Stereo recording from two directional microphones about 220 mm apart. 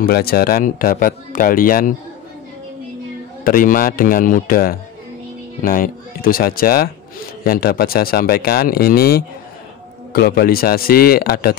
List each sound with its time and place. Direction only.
0.0 s speech: 45° left (ahead or behind)
3.4 s speech: 40° left (ahead or behind)